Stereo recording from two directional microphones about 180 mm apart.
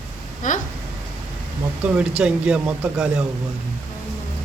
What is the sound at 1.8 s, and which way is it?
A man's voice, 10° right (ahead or behind).